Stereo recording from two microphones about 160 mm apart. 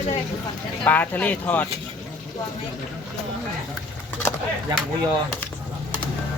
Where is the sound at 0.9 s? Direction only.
10° left (ahead or behind).